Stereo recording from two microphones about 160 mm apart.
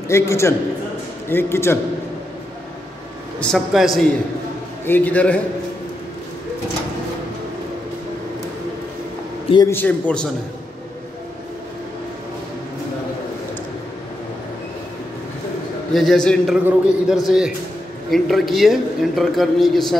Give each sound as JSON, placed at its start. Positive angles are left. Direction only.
{"t": 0.1, "sound": "a man's voice", "side_deg": 15}
{"t": 3.3, "sound": "a man's voice", "side_deg": 0}
{"t": 4.8, "sound": "a man's voice", "side_deg": 10}
{"t": 9.7, "sound": "a man's voice", "side_deg": 10}
{"t": 15.9, "sound": "a man's voice", "side_deg": 0}